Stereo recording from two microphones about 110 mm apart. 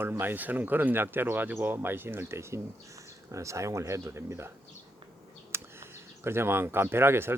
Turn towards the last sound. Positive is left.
turn(degrees=-20)  # may be behind; listen again after turning